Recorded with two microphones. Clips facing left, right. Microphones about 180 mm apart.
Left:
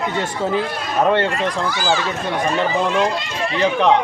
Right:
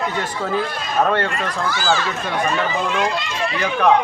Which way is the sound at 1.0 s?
20° left (ahead or behind).